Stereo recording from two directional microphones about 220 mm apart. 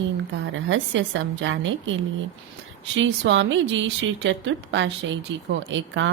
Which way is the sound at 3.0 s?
55° right (ahead or behind).